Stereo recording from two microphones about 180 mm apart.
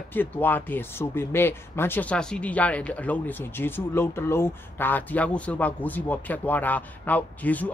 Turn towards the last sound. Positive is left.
turn(degrees=10)  # may be behind; listen again after turning